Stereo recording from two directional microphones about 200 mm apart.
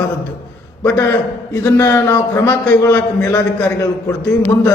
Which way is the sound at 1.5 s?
15° left (ahead or behind).